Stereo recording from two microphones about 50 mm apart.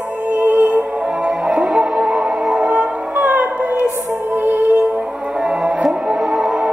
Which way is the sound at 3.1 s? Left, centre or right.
Right.